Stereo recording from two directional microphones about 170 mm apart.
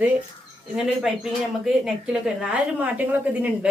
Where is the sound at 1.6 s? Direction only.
5° right (ahead or behind).